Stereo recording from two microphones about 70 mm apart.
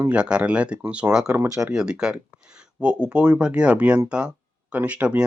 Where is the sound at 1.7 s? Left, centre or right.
Centre.